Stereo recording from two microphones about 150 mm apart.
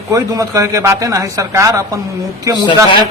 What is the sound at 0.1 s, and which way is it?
A man's voice, 20° right (ahead or behind).